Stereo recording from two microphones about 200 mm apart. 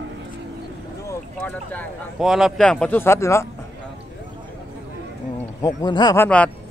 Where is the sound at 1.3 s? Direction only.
5° left (ahead or behind).